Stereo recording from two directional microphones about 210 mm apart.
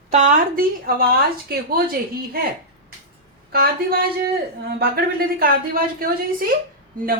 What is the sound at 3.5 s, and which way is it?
Speech, 45° right (ahead or behind).